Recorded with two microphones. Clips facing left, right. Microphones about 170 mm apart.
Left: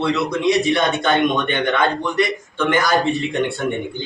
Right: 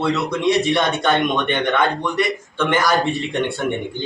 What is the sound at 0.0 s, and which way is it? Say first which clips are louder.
A man's voice: left 1 dB; centre (ahead or behind).